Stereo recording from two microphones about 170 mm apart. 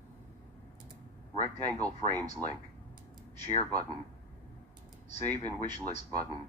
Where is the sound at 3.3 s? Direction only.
40° left (ahead or behind).